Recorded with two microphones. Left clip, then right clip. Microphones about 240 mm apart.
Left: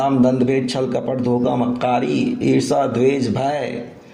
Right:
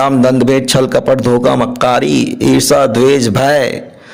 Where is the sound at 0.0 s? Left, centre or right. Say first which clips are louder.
Right 7 dB; right.